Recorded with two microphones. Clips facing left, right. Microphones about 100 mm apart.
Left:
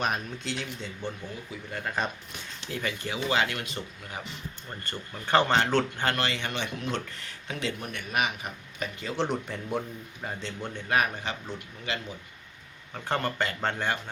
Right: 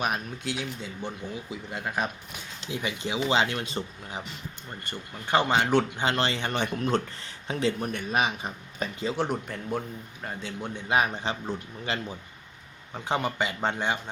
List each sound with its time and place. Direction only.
0.0 s a man's voice: 5° right (ahead or behind); by 4.2 s 30° right (ahead or behind)
4.8 s speech: 15° right (ahead or behind)
6.1 s speech: 30° right (ahead or behind)
9.1 s a man's voice: 5° right (ahead or behind); by 11.9 s 30° right (ahead or behind)
12.9 s speech: 15° right (ahead or behind)